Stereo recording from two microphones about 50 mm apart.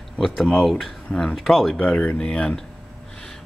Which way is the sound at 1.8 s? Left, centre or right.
Left.